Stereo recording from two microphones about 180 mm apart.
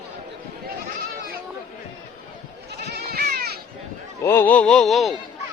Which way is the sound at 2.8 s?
60° right (ahead or behind).